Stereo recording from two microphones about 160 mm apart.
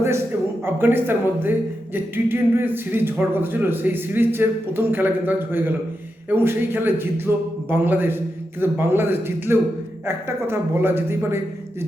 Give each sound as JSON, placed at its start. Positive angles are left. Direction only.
{"t": 0.6, "sound": "speech", "side_deg": -15}